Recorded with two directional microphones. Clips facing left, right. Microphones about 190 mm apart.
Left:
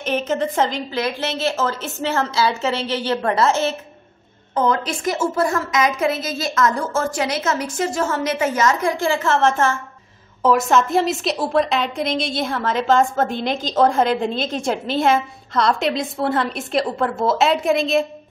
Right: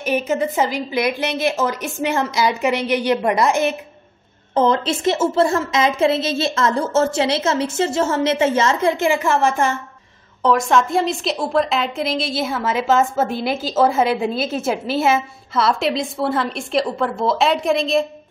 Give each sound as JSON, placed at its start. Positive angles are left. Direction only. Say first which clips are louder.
{"t": 0.0, "sound": "a woman's voice", "louder": "right 1 dB", "side_deg": -10}
{"t": 4.6, "sound": "a woman's voice", "louder": "right 3 dB", "side_deg": -25}
{"t": 10.4, "sound": "a woman's voice", "louder": "even", "side_deg": 5}